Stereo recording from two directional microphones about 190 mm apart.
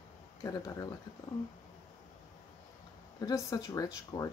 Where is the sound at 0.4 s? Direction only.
20° left (ahead or behind).